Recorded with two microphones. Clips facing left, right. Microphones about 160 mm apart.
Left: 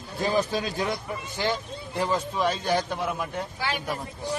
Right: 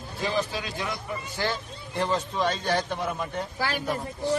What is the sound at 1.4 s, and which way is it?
A man's voice, 15° left (ahead or behind).